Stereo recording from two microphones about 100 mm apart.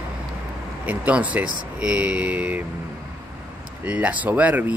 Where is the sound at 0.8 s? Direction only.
15° right (ahead or behind).